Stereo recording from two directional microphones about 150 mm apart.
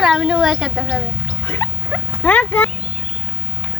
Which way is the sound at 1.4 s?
15° left (ahead or behind).